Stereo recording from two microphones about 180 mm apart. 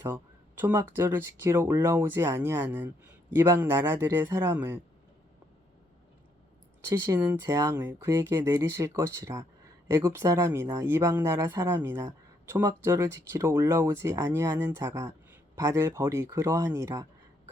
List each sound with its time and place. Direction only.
0.6 s speech: 15° right (ahead or behind)
6.8 s speech: 15° right (ahead or behind)